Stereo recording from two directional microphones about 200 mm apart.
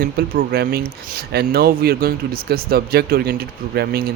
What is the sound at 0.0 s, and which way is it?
Speech, 50° right (ahead or behind).